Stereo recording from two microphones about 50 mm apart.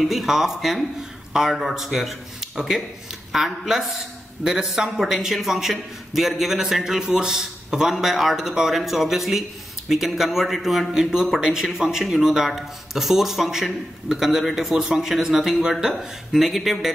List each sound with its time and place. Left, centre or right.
0.0 s a man's voice: centre